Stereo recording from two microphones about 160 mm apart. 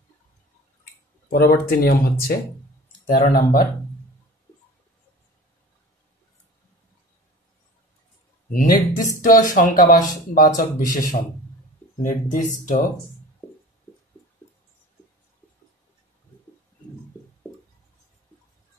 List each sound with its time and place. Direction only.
1.3 s speech: 70° left (ahead or behind)
8.5 s speech: 60° left (ahead or behind)
13.4 s music: 15° left (ahead or behind)